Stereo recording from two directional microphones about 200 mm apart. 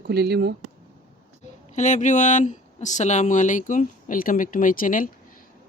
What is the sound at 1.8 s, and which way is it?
Speech, 40° left (ahead or behind).